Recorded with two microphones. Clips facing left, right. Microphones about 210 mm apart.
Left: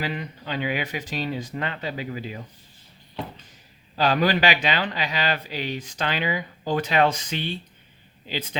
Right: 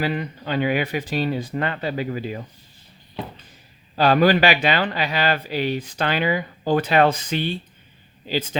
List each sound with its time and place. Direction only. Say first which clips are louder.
0.0 s speech: right 5 dB; 50° right (ahead or behind)
3.9 s speech: right 5 dB; 50° right (ahead or behind)